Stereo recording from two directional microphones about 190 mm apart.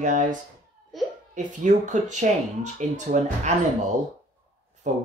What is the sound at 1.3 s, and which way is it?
Speech, 40° right (ahead or behind).